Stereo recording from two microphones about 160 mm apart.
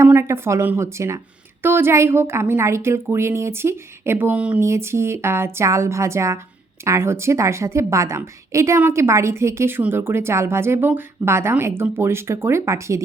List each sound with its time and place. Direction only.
0.0 s a woman's voice: 15° right (ahead or behind)